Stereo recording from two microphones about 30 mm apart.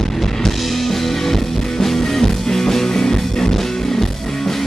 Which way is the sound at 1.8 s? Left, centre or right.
Centre.